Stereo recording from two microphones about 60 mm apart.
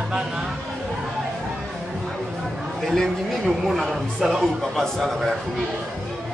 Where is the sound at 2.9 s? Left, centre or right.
Centre.